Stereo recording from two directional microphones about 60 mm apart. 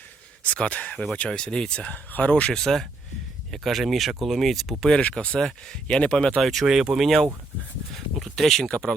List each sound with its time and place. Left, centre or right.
0.4 s speech: left
2.6 s speech: centre
4.8 s speech: centre
6.4 s speech: centre
7.9 s a sound: centre